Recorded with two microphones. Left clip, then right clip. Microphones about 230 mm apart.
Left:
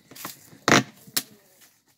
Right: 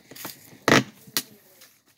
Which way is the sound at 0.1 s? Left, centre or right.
Centre.